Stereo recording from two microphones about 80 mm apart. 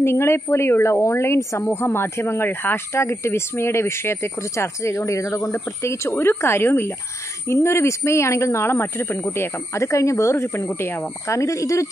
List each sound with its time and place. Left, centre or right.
0.0 s speech: left